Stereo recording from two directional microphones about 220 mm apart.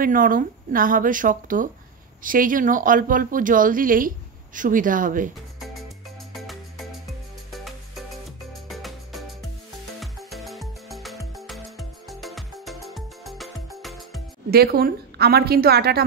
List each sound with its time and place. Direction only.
0.0 s a woman's voice: 40° right (ahead or behind)
6.3 s music: centre (ahead or behind)
14.5 s a woman's voice: 45° right (ahead or behind)